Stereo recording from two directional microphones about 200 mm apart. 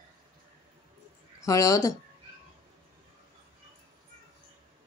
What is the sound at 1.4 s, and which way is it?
Speech, 15° left (ahead or behind).